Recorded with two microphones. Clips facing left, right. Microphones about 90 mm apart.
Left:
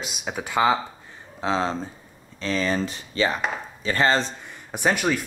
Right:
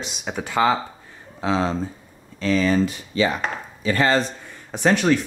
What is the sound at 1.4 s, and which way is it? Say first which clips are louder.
Speech: right 2 dB; 35° left (ahead or behind).